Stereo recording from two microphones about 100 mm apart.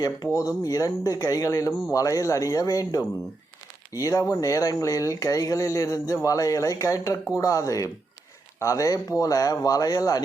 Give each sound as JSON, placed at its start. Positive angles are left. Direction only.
{"t": 0.0, "sound": "speech", "side_deg": 35}